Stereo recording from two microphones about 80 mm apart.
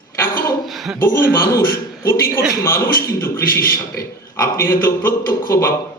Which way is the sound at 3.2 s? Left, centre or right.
Left.